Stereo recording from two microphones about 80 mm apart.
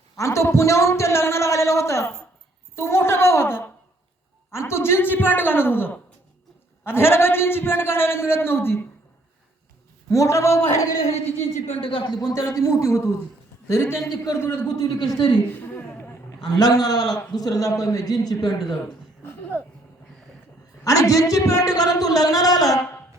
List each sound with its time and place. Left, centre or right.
0.2 s a man's voice: left
2.7 s a sound: left
4.5 s a man's voice: left
10.1 s a man's voice: left
11.8 s speech: left
12.1 s a man's voice: left
12.4 s a man's voice: left
14.8 s speech: left
15.4 s a sound: left
16.5 s a man's voice: left
19.2 s a sound: left
20.8 s a man's voice: left